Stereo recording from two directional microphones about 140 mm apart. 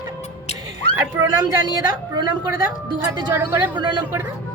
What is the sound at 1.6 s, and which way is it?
A woman's voice, 30° right (ahead or behind).